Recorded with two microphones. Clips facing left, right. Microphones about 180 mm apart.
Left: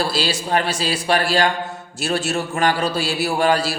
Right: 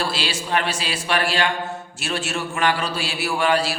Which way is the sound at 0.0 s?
40° left (ahead or behind).